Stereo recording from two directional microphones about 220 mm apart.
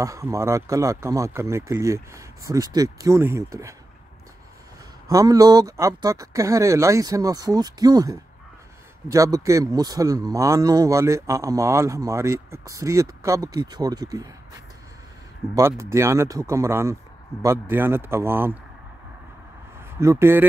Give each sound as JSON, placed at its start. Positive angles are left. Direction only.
{"t": 0.0, "sound": "speech", "side_deg": -15}
{"t": 5.0, "sound": "speech", "side_deg": -15}
{"t": 20.0, "sound": "speech", "side_deg": -10}